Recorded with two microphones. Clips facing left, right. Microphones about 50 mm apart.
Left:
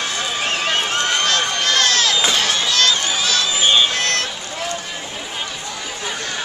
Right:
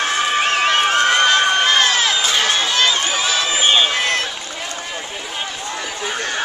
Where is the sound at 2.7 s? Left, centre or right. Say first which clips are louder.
Right 1 dB; centre.